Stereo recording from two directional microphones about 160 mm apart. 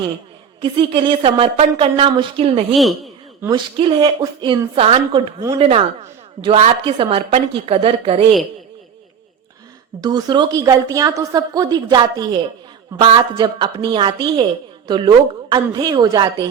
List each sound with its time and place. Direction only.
0.6 s a woman's voice: 35° right (ahead or behind)
2.7 s speech: centre (ahead or behind)
3.5 s a woman's voice: 30° right (ahead or behind)
10.0 s a woman's voice: 25° right (ahead or behind)